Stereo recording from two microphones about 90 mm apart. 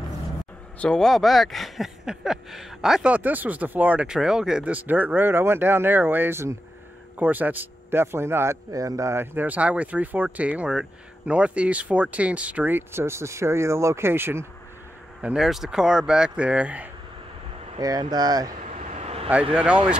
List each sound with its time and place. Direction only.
0.7 s speech: 5° left (ahead or behind); by 4.7 s 10° right (ahead or behind)
4.7 s speech: 20° right (ahead or behind)
8.7 s speech: 40° right (ahead or behind)
15.2 s speech: 5° right (ahead or behind)
17.7 s speech: 45° right (ahead or behind)
19.5 s speech: 15° right (ahead or behind)